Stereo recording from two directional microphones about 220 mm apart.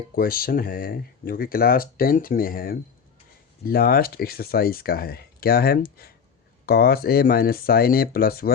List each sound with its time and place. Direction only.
0.2 s speech: 40° left (ahead or behind)